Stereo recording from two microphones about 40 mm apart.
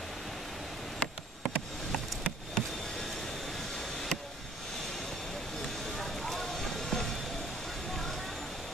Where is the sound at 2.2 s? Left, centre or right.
Centre.